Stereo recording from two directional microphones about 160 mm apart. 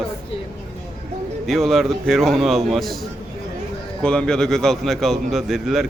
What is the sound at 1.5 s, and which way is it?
A man's voice, centre (ahead or behind).